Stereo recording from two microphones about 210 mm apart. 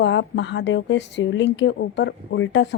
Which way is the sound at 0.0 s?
60° left (ahead or behind).